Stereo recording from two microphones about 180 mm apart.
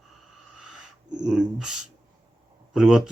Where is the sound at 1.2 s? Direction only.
5° right (ahead or behind).